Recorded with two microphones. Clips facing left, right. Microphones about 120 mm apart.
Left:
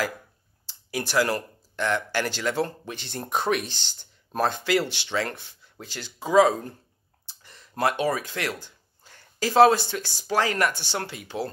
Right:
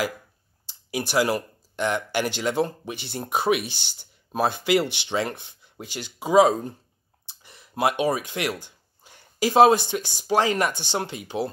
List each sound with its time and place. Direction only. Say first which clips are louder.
0.7 s speech: right 2 dB; 15° right (ahead or behind)